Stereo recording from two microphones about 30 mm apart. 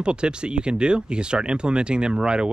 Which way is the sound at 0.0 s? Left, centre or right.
Right.